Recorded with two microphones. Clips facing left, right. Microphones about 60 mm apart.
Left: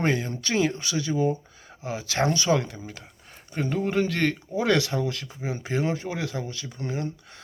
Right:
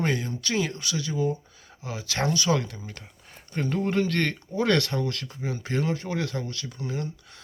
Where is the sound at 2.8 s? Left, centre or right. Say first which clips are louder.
Left 2 dB; centre.